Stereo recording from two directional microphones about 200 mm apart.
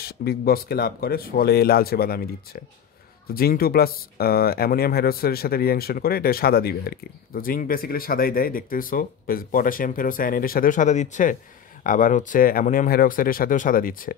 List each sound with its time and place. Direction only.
0.0 s speech: 50° left (ahead or behind)